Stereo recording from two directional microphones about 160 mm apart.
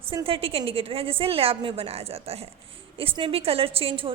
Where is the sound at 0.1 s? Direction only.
35° right (ahead or behind).